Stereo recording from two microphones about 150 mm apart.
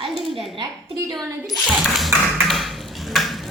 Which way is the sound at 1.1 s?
Centre (ahead or behind).